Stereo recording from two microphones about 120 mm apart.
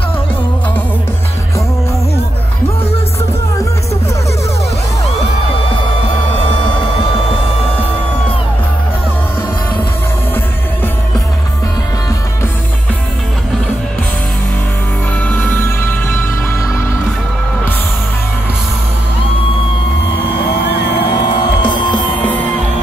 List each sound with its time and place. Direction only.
15.2 s music: 15° left (ahead or behind)
21.6 s music: 40° left (ahead or behind)
22.2 s music: 10° left (ahead or behind)